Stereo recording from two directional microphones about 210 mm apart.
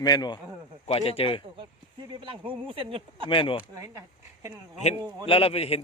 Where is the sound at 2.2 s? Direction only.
25° right (ahead or behind).